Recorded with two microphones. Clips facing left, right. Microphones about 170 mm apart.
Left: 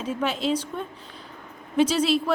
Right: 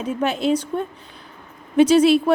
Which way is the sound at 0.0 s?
60° right (ahead or behind).